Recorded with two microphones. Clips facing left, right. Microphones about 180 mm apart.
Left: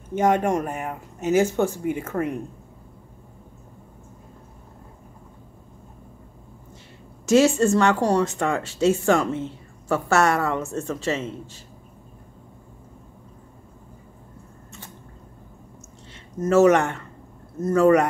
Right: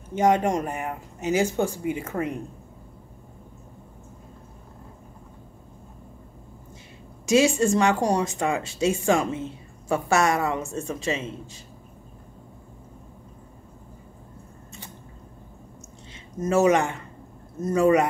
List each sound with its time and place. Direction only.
0.1 s speech: 50° left (ahead or behind)
1.4 s speech: 15° right (ahead or behind)
7.2 s speech: 15° right (ahead or behind)
16.1 s speech: 15° right (ahead or behind)